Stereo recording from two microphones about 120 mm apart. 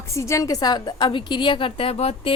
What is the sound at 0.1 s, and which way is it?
A woman's voice, 25° left (ahead or behind).